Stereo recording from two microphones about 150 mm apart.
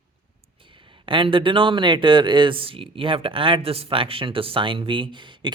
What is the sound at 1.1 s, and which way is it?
Speech, 35° right (ahead or behind).